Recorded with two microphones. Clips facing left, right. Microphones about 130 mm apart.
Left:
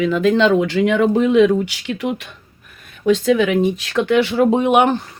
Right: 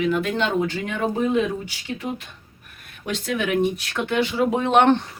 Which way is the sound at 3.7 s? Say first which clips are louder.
Left 7 dB; 90° left.